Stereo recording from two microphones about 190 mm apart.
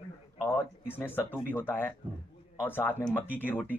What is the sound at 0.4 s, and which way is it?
Speech, 10° left (ahead or behind).